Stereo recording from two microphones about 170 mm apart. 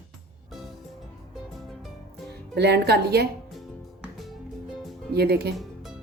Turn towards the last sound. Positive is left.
turn(degrees=-70)  # may be behind; listen again after turning